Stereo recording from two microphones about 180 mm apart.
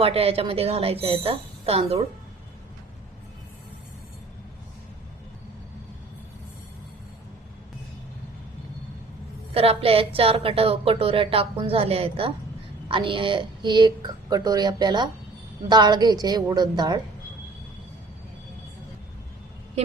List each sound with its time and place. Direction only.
0.0 s a woman's voice: 35° right (ahead or behind)
9.6 s a woman's voice: 30° right (ahead or behind)